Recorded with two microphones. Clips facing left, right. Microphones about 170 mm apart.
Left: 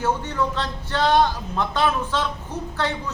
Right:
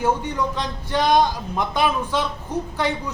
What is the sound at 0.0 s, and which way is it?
A man's voice, 15° right (ahead or behind).